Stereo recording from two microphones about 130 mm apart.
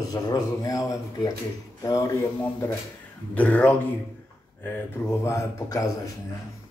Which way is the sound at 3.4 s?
10° left (ahead or behind).